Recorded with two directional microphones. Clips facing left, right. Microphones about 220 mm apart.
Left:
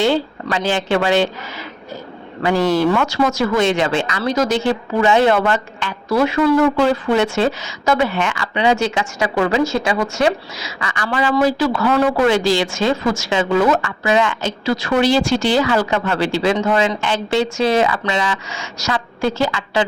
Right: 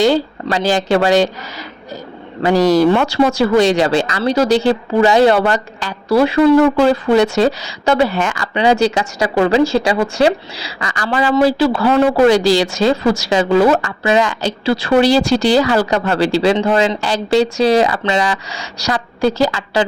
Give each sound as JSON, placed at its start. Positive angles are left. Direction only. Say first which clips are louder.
{"t": 0.5, "sound": "speech", "louder": "right 3 dB", "side_deg": -40}
{"t": 2.4, "sound": "speech", "louder": "right 4 dB", "side_deg": -40}